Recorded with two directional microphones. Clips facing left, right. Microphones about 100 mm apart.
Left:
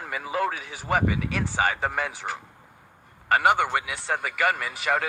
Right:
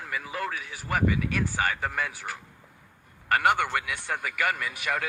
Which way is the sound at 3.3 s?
10° left (ahead or behind).